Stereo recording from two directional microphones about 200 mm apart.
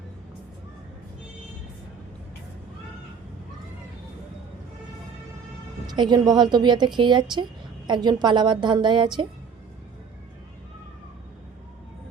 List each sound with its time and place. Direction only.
5.9 s speech: 20° right (ahead or behind)